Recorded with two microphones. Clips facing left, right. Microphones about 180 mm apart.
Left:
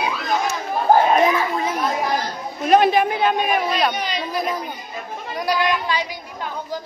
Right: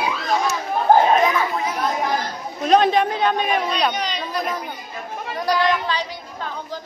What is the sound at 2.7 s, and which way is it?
A man's voice, 5° left (ahead or behind).